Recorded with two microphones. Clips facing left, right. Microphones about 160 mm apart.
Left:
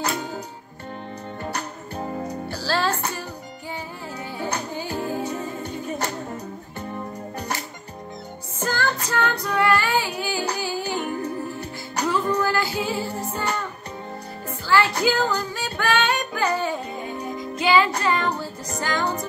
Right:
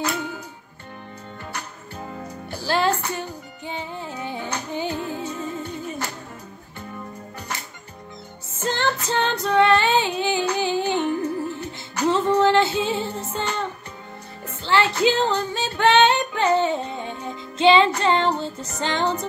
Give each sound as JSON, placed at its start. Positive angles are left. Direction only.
{"t": 1.4, "sound": "music", "side_deg": 40}
{"t": 2.5, "sound": "music", "side_deg": -20}
{"t": 8.6, "sound": "child singing", "side_deg": -25}
{"t": 10.6, "sound": "music", "side_deg": -20}
{"t": 12.1, "sound": "child singing", "side_deg": -25}
{"t": 14.7, "sound": "music", "side_deg": -25}
{"t": 15.0, "sound": "female singing", "side_deg": -25}
{"t": 18.8, "sound": "music", "side_deg": -25}